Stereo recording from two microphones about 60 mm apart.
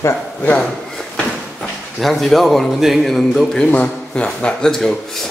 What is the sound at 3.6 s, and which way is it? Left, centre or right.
A man's voice, left.